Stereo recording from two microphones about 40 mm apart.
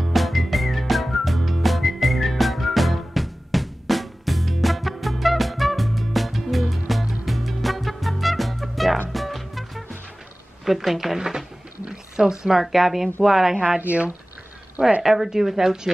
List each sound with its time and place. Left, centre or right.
0.0 s whistling: centre
6.7 s music: centre
10.6 s a woman's voice: centre
11.1 s a woman's voice: centre
13.6 s speech: right
15.0 s a woman's voice: centre